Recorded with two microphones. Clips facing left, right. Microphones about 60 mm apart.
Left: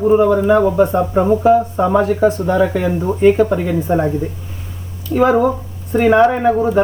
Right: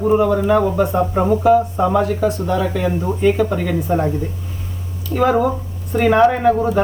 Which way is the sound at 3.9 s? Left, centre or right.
Centre.